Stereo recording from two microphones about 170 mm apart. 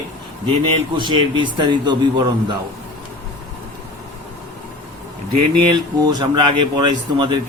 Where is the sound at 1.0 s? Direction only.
30° right (ahead or behind).